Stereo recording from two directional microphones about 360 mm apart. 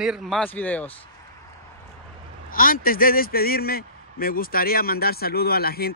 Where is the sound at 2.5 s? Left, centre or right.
Left.